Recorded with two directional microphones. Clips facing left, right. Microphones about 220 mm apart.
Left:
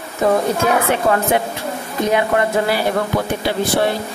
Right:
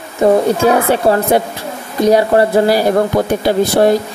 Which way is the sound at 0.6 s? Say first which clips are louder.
Right 5 dB; 35° right (ahead or behind).